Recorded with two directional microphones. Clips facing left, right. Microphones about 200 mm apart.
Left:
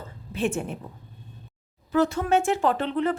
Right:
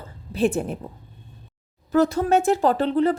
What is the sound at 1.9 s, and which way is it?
A woman's voice, 40° right (ahead or behind).